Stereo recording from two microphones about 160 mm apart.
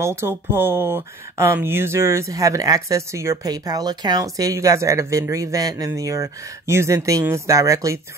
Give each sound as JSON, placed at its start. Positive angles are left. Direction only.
{"t": 0.0, "sound": "speech", "side_deg": -15}